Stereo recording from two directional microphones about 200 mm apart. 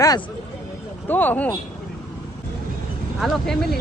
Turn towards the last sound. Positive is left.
turn(degrees=0)  # may be behind; listen again after turning